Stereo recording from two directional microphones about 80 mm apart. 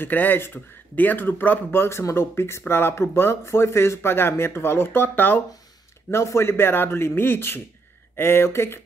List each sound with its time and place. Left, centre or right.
0.0 s speech: left
6.0 s speech: left